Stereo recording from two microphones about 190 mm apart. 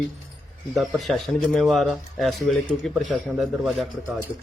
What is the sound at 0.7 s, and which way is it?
A man's voice, centre (ahead or behind).